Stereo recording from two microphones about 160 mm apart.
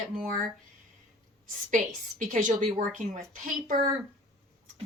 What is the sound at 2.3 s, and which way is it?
Speech, 50° right (ahead or behind).